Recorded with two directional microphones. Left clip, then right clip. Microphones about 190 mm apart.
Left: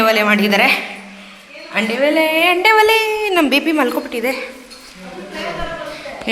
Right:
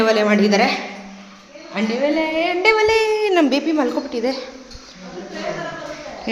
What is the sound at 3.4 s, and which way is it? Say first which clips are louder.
Speech: left 3 dB; centre (ahead or behind).